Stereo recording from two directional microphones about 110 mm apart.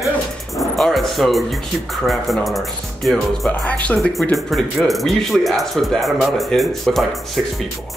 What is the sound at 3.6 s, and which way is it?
Speech, 15° left (ahead or behind).